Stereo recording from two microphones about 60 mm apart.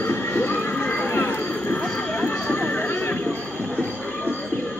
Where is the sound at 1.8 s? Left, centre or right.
Left.